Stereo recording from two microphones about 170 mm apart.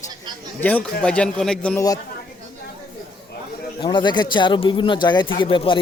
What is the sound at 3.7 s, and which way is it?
Speech, 25° left (ahead or behind).